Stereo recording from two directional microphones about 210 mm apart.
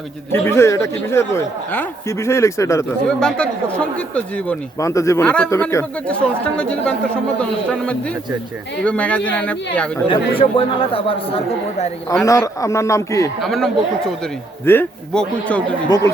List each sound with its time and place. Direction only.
0.3 s speech: 10° left (ahead or behind)
10.1 s speech: 25° left (ahead or behind)
12.2 s speech: 15° left (ahead or behind)
13.4 s speech: centre (ahead or behind)